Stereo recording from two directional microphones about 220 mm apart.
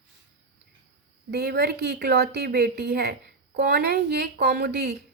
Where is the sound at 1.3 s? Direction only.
45° right (ahead or behind).